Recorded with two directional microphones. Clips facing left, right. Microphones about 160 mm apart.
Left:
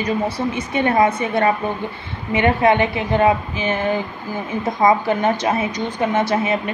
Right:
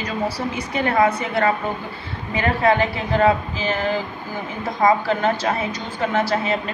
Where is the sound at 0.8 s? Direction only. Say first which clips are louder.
Left 2 dB; 20° left (ahead or behind).